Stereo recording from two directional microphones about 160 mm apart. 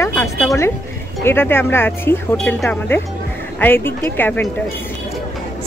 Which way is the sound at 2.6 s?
10° left (ahead or behind).